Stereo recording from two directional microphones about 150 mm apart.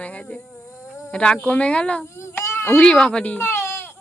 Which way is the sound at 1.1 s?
5° left (ahead or behind).